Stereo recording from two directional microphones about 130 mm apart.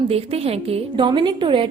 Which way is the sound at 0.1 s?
50° right (ahead or behind).